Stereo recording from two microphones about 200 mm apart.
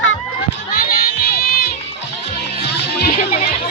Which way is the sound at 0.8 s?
50° left (ahead or behind).